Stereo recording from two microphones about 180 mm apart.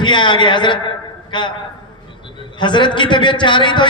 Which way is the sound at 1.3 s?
25° left (ahead or behind).